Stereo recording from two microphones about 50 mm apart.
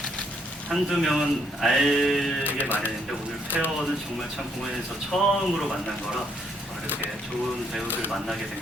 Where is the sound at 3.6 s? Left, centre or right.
Centre.